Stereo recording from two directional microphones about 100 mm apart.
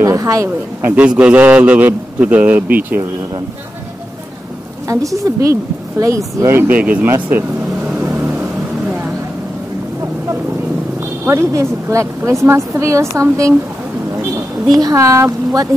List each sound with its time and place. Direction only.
0.0 s speech: 30° right (ahead or behind)
0.8 s a man's voice: 15° right (ahead or behind)
4.8 s a woman's voice: 35° right (ahead or behind)
6.7 s a man's voice: 15° right (ahead or behind)
8.0 s vehicle: 20° right (ahead or behind)
11.0 s a woman's voice: 30° right (ahead or behind)